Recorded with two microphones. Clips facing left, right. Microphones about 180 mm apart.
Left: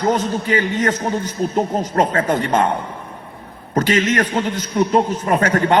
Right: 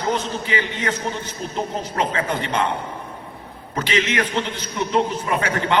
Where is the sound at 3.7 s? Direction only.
45° left (ahead or behind).